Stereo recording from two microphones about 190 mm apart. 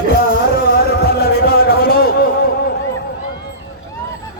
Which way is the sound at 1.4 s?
55° left (ahead or behind).